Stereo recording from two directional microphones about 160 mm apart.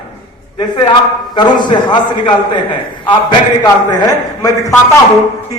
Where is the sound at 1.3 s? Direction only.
30° left (ahead or behind).